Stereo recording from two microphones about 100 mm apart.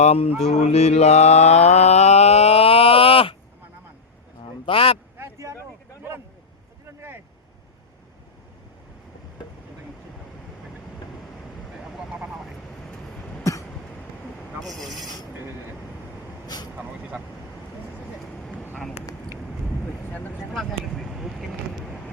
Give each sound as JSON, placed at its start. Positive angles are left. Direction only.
{"t": 0.0, "sound": "music", "side_deg": 85}
{"t": 0.5, "sound": "mantra", "side_deg": 90}
{"t": 4.6, "sound": "speech", "side_deg": 65}
{"t": 5.1, "sound": "a sound", "side_deg": -25}
{"t": 6.8, "sound": "boat", "side_deg": -25}
{"t": 12.1, "sound": "vehicle", "side_deg": -5}
{"t": 13.4, "sound": "cough", "side_deg": 35}
{"t": 14.8, "sound": "a sound", "side_deg": 0}
{"t": 16.5, "sound": "vehicle", "side_deg": 45}
{"t": 20.5, "sound": "vehicle", "side_deg": 0}